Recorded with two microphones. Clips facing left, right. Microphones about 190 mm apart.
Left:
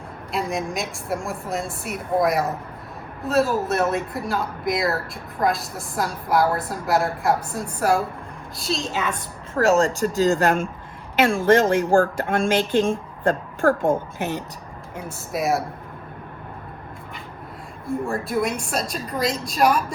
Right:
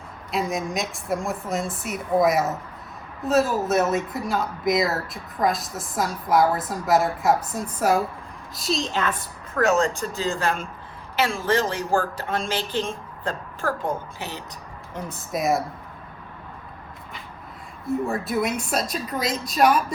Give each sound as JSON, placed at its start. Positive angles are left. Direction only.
{"t": 0.3, "sound": "speech", "side_deg": 0}
{"t": 9.6, "sound": "speech", "side_deg": 35}
{"t": 10.2, "sound": "speech", "side_deg": 45}
{"t": 14.9, "sound": "speech", "side_deg": 0}
{"t": 17.8, "sound": "speech", "side_deg": 0}